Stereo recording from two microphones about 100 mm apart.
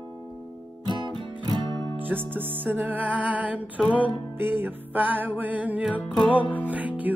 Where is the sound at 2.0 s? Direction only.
20° right (ahead or behind).